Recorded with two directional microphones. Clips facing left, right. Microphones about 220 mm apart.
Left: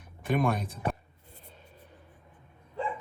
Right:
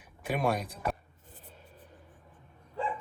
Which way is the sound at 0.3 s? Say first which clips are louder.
Left 2 dB; 5° right (ahead or behind).